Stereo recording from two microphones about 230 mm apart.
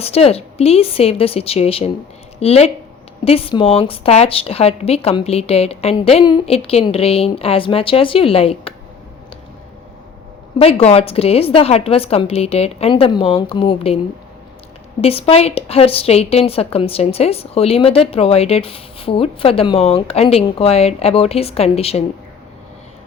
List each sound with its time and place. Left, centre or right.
0.0 s a woman's voice: left
10.6 s a woman's voice: left
15.0 s a woman's voice: left